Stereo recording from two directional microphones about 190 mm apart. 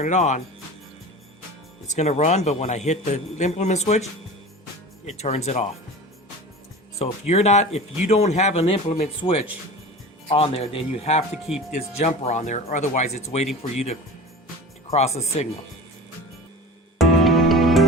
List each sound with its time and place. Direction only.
0.0 s a man's voice: 40° left (ahead or behind)
1.9 s a man's voice: 35° left (ahead or behind)
7.0 s a man's voice: 35° left (ahead or behind)
17.0 s music: centre (ahead or behind)